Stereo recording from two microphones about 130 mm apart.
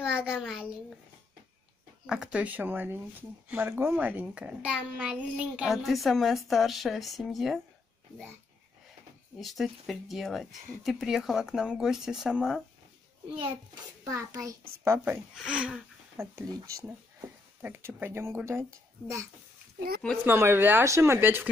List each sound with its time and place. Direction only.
0.0 s a sound: 5° right (ahead or behind)
2.0 s speech: 5° right (ahead or behind)
9.4 s speech: centre (ahead or behind)
14.0 s speech: 25° right (ahead or behind)
15.3 s speech: 5° right (ahead or behind)
16.2 s speech: 20° right (ahead or behind)
20.2 s speech: 20° right (ahead or behind)